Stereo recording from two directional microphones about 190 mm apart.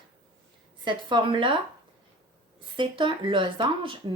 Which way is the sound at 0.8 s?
25° right (ahead or behind).